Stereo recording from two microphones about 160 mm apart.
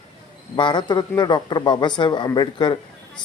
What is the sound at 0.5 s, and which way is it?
Speech, 30° left (ahead or behind).